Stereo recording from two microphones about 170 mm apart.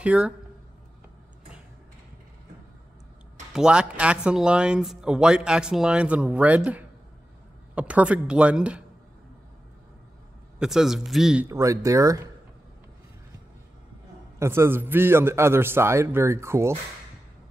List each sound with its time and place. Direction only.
0.0 s speech: 5° right (ahead or behind)
3.5 s a man's voice: 5° right (ahead or behind)
10.6 s speech: centre (ahead or behind)
11.4 s speech: 20° right (ahead or behind)
14.4 s a man's voice: 15° right (ahead or behind)